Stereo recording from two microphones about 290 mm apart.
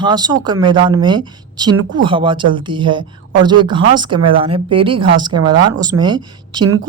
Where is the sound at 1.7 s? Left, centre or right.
Right.